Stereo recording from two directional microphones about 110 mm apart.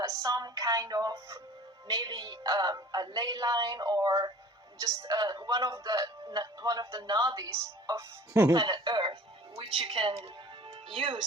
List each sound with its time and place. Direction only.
0.0 s music: 35° right (ahead or behind)
1.9 s speech: 40° right (ahead or behind)
8.5 s speech: 45° right (ahead or behind)
9.6 s speech: 55° right (ahead or behind)